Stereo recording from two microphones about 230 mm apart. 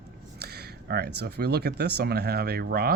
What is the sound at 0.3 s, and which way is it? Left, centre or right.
Speech, right.